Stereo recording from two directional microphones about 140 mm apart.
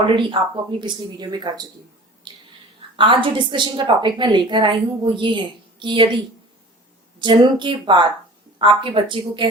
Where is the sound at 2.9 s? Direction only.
35° right (ahead or behind).